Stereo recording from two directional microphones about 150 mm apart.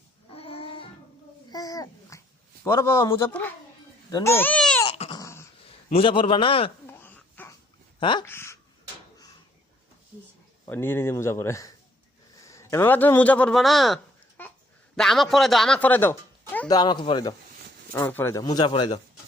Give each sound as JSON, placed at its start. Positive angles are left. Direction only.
{"t": 0.3, "sound": "music", "side_deg": 40}
{"t": 1.5, "sound": "babbling", "side_deg": 25}
{"t": 2.6, "sound": "speech", "side_deg": 15}
{"t": 4.9, "sound": "dog", "side_deg": 40}
{"t": 5.1, "sound": "a sound", "side_deg": 20}
{"t": 5.6, "sound": "a man's voice", "side_deg": 40}
{"t": 6.8, "sound": "babbling", "side_deg": 15}
{"t": 7.9, "sound": "speech", "side_deg": 30}
{"t": 8.3, "sound": "speech", "side_deg": 15}
{"t": 10.7, "sound": "a man's voice", "side_deg": 15}
{"t": 14.4, "sound": "babbling", "side_deg": 10}
{"t": 14.9, "sound": "a man's voice", "side_deg": 0}
{"t": 16.6, "sound": "speech", "side_deg": 25}
{"t": 17.9, "sound": "speech", "side_deg": 15}